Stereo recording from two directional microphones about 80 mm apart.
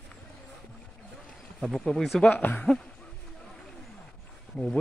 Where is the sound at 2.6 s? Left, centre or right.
Centre.